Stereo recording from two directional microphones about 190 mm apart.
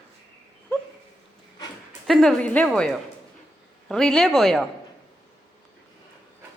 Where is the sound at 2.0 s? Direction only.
Centre (ahead or behind).